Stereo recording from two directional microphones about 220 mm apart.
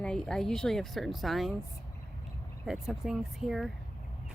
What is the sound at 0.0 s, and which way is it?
Speech, 5° left (ahead or behind).